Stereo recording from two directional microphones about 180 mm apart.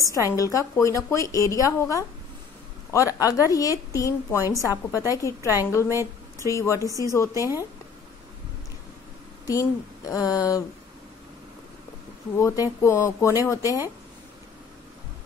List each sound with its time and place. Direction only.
0.0 s a woman's voice: 20° left (ahead or behind)
5.9 s speech: 15° right (ahead or behind)
6.5 s a woman's voice: 15° left (ahead or behind)
9.5 s speech: 20° left (ahead or behind)
12.4 s a woman's voice: 15° left (ahead or behind)